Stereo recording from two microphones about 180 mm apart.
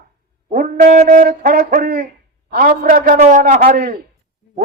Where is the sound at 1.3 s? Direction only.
55° right (ahead or behind).